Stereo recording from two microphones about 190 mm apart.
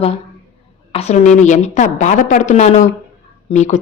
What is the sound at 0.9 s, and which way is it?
A woman's voice, 35° left (ahead or behind).